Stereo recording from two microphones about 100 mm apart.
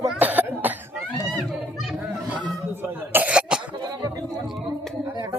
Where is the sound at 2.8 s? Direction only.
20° right (ahead or behind).